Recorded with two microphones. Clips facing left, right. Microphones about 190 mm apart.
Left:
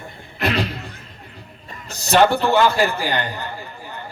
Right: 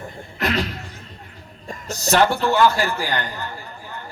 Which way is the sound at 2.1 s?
15° left (ahead or behind).